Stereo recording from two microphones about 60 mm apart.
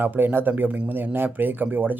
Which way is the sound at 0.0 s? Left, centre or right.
Right.